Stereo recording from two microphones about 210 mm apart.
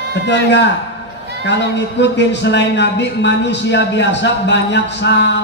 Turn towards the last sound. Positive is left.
turn(degrees=55)  # may be behind; listen again after turning